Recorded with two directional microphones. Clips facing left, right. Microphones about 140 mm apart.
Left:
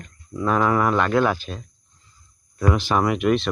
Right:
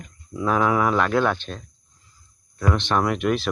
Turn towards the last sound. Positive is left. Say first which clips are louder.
# left 2 dB
turn(degrees=0)  # may be behind; listen again after turning